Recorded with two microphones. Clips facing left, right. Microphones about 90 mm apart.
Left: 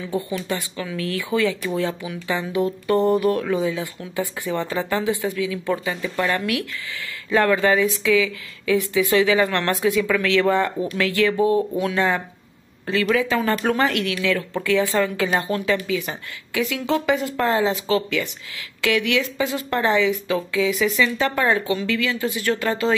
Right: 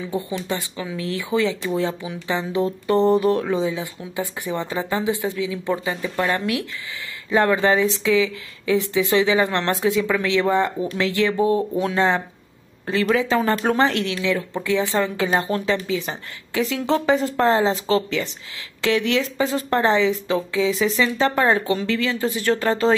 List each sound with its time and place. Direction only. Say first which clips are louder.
0.0 s speech: even; 20° right (ahead or behind)